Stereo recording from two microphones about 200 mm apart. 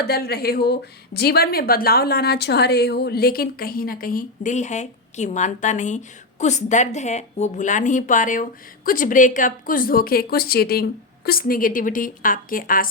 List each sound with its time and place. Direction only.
0.0 s speech: 50° left (ahead or behind)